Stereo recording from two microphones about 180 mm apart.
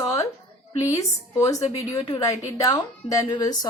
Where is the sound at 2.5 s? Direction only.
20° left (ahead or behind).